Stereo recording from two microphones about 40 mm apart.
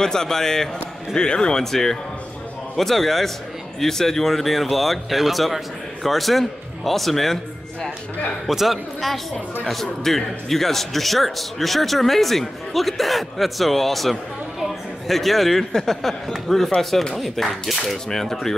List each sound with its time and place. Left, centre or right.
0.0 s speech: centre
1.6 s a man's voice: centre
8.5 s a man's voice: centre